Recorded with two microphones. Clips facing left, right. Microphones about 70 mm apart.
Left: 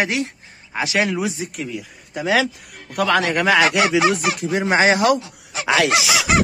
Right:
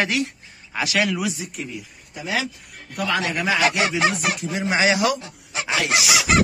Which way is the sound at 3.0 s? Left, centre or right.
Left.